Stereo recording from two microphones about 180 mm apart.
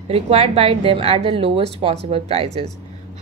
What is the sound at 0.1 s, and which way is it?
A woman's voice, 35° right (ahead or behind).